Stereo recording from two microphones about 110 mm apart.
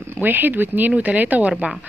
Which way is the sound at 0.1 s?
15° right (ahead or behind).